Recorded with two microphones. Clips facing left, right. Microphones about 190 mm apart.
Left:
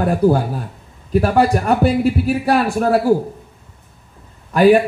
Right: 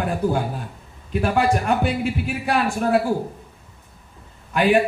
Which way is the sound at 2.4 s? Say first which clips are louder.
Left 4 dB; 40° left (ahead or behind).